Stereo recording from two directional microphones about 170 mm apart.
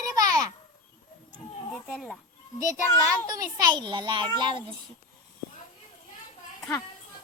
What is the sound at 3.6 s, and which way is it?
A child's voice, 25° right (ahead or behind).